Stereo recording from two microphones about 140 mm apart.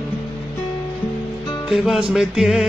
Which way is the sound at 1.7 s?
5° right (ahead or behind).